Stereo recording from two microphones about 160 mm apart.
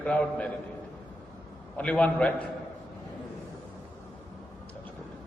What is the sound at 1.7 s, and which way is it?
Speech, 10° left (ahead or behind).